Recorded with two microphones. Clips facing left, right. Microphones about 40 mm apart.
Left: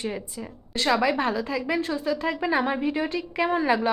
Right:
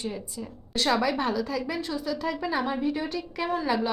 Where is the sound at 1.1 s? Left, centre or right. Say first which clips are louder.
Left 2 dB; centre.